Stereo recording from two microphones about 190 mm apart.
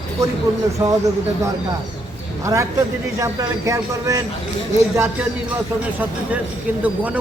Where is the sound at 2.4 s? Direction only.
15° right (ahead or behind).